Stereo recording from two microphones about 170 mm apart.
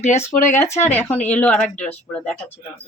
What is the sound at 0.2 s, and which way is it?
Speech, 15° left (ahead or behind).